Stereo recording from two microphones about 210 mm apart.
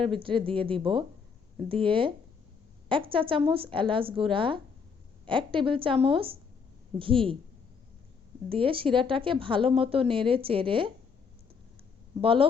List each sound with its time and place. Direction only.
0.0 s a woman's voice: 25° right (ahead or behind)
8.4 s a woman's voice: 25° right (ahead or behind)
12.2 s a woman's voice: 25° right (ahead or behind)